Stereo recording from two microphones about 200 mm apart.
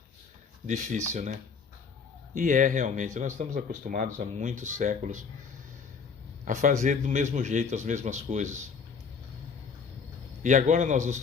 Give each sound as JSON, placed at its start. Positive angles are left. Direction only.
{"t": 0.7, "sound": "speech", "side_deg": -35}
{"t": 6.4, "sound": "speech", "side_deg": -40}
{"t": 10.4, "sound": "speech", "side_deg": -40}